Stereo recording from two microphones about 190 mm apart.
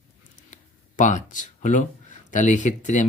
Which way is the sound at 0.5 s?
40° left (ahead or behind).